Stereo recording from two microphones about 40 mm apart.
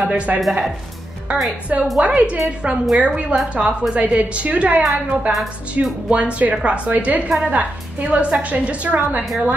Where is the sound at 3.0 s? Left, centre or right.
Right.